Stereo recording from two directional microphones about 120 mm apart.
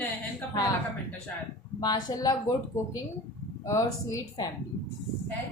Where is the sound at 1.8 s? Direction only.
35° left (ahead or behind).